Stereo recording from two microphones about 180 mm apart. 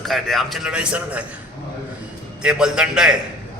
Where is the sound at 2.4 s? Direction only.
5° right (ahead or behind).